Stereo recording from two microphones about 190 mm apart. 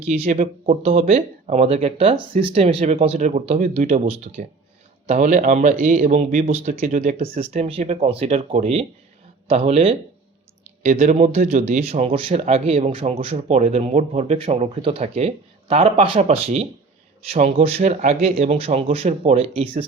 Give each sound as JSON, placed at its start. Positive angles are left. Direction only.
{"t": 0.0, "sound": "speech", "side_deg": -35}